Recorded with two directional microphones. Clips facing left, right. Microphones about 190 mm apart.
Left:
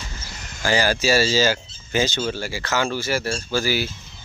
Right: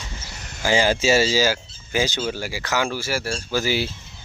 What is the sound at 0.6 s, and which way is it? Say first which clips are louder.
Speech: right 1 dB; 20° right (ahead or behind).